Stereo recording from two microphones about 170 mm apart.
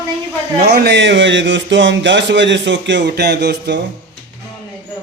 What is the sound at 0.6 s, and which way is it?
Speech, 70° right (ahead or behind).